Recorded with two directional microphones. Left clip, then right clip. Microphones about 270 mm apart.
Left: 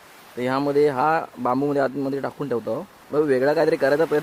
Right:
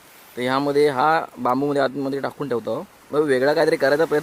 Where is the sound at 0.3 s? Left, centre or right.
Centre.